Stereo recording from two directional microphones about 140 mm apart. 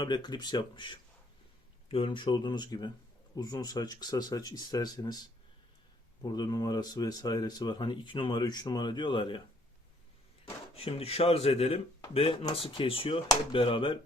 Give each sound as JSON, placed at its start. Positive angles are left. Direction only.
{"t": 0.0, "sound": "speech", "side_deg": 30}
{"t": 10.4, "sound": "speech", "side_deg": 45}